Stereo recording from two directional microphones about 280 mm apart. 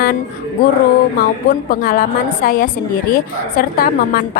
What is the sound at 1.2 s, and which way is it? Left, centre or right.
A woman's voice, left.